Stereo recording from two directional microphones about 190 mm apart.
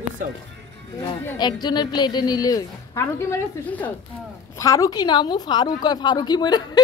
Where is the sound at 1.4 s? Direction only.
20° left (ahead or behind).